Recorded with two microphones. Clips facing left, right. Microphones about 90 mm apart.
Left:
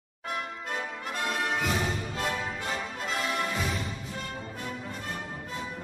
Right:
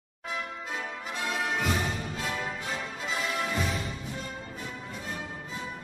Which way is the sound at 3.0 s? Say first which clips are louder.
Left 1 dB; centre (ahead or behind).